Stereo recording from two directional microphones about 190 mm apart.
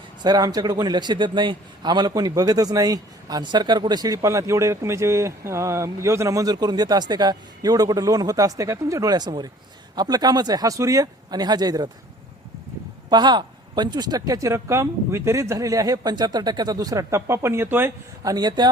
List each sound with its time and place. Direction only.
0.2 s a man's voice: 20° right (ahead or behind)
13.1 s speech: 25° right (ahead or behind)